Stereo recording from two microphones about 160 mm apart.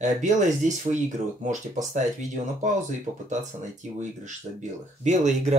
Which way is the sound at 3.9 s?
50° right (ahead or behind).